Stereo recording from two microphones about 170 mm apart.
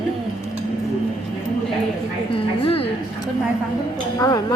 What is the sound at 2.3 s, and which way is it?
Speech, 35° left (ahead or behind).